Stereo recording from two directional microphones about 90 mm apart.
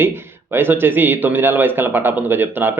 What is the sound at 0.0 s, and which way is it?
A man's voice, 25° right (ahead or behind).